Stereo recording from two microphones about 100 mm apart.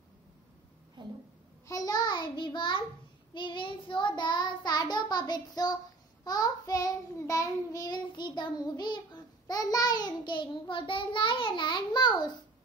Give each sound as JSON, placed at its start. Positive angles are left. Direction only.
{"t": 1.0, "sound": "a sound", "side_deg": -50}
{"t": 1.7, "sound": "a child's voice", "side_deg": 40}
{"t": 3.3, "sound": "child singing", "side_deg": 55}